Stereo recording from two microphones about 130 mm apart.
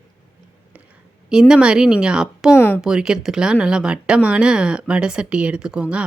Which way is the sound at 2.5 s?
15° left (ahead or behind).